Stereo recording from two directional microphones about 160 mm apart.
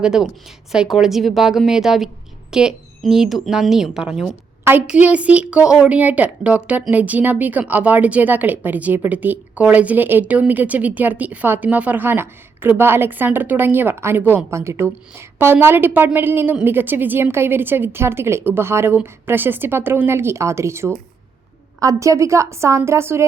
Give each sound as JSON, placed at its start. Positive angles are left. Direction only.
{"t": 0.0, "sound": "a woman's voice", "side_deg": -5}